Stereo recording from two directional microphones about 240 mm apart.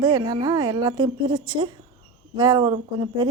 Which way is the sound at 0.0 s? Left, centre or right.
Centre.